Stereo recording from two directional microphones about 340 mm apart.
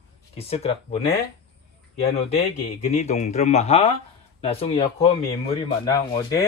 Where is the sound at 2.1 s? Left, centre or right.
Centre.